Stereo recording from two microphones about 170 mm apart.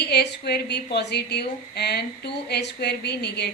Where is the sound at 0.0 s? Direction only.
75° left (ahead or behind).